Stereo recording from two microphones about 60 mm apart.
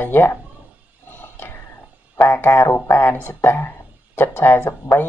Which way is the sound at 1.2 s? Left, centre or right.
Left.